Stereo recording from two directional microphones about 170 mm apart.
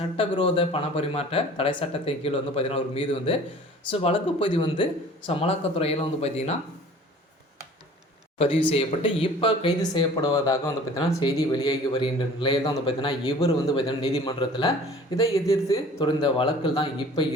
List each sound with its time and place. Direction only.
0.0 s speech: 30° left (ahead or behind)
8.7 s speech: 35° left (ahead or behind)
15.1 s speech: 20° left (ahead or behind)
16.0 s speech: 30° left (ahead or behind)